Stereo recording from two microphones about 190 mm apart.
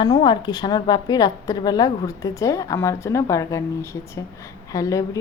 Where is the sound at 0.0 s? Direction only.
25° left (ahead or behind).